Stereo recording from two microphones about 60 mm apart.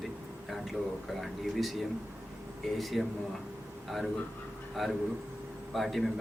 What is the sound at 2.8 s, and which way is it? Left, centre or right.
Speech, centre.